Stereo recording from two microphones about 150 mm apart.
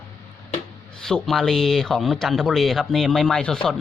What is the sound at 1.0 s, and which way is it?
Speech, centre (ahead or behind).